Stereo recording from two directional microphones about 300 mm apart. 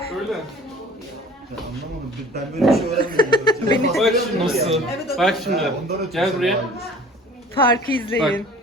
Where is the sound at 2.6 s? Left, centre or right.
Centre.